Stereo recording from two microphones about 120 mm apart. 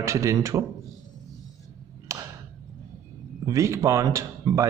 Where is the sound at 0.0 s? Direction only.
25° right (ahead or behind).